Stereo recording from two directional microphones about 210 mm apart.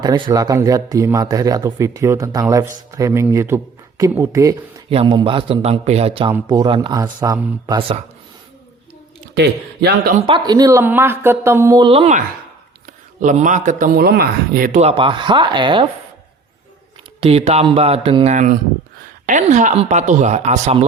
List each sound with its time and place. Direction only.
0.0 s speech: 15° right (ahead or behind)
9.3 s speech: 50° right (ahead or behind)
10.2 s speech: 25° right (ahead or behind)
17.2 s speech: 25° right (ahead or behind)